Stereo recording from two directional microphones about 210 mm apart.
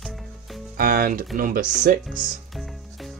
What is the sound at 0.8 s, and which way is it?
Speech, 45° right (ahead or behind).